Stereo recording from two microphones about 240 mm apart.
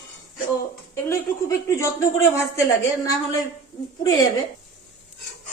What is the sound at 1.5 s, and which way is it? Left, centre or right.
Speech, centre.